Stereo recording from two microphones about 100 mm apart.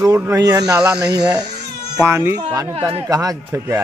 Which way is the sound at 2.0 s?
25° right (ahead or behind).